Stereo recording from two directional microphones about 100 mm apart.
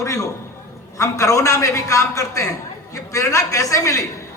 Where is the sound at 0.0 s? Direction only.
35° left (ahead or behind).